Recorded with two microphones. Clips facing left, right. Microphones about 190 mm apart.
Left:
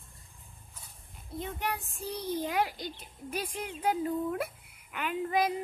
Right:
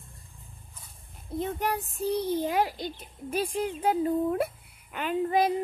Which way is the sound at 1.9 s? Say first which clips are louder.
Right 7 dB; 30° right (ahead or behind).